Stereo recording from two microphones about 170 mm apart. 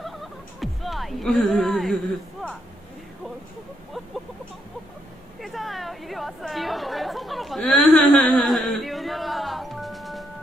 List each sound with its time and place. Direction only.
0.0 s music: centre (ahead or behind)
5.4 s chatter: centre (ahead or behind)